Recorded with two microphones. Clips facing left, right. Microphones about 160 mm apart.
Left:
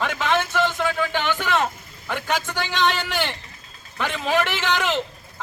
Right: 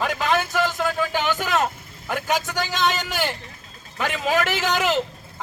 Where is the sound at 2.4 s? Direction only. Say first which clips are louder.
Even; 40° right (ahead or behind).